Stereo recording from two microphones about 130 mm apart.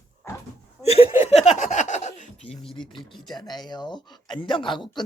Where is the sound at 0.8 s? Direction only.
50° left (ahead or behind).